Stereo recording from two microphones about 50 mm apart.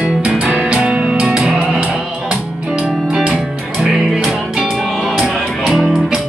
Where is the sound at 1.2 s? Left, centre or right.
Centre.